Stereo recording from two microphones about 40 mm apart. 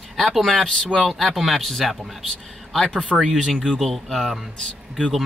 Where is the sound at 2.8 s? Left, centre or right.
Left.